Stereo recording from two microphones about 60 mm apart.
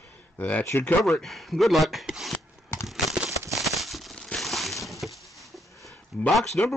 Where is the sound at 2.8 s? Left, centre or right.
Centre.